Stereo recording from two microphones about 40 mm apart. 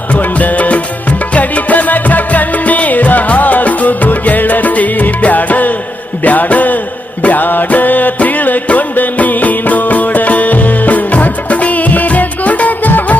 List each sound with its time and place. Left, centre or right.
0.2 s music: left
6.2 s a sound: left
7.2 s music: left